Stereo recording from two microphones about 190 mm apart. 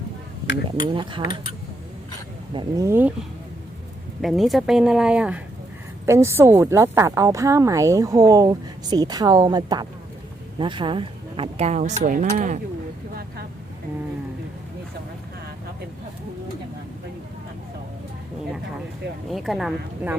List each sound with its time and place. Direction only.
0.8 s speech: 25° right (ahead or behind)
2.5 s a woman's voice: 20° right (ahead or behind)
4.2 s a woman's voice: centre (ahead or behind); by 12.5 s 45° right (ahead or behind)
19.3 s speech: centre (ahead or behind)